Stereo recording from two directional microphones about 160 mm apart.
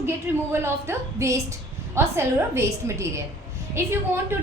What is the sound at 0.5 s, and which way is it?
A woman's voice, 15° right (ahead or behind).